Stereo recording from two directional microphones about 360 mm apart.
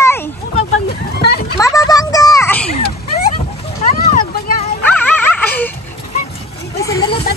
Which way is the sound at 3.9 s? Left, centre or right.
Centre.